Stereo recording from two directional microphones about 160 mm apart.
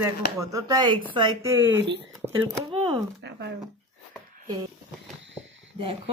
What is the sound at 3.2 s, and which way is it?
Speech, 90° right.